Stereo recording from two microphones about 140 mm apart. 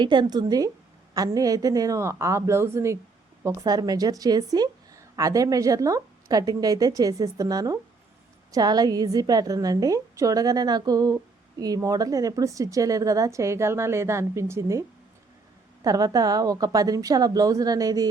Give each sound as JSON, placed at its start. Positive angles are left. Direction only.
{"t": 0.0, "sound": "a woman's voice", "side_deg": -35}